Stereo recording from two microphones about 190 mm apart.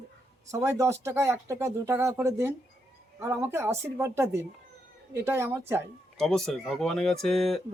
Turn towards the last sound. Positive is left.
turn(degrees=0)  # may be behind; listen again after turning